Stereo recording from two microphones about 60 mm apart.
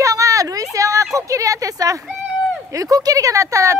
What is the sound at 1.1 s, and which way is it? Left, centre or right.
Speech, right.